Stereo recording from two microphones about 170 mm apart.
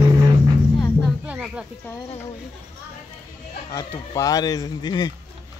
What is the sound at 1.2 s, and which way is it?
Music, 5° right (ahead or behind).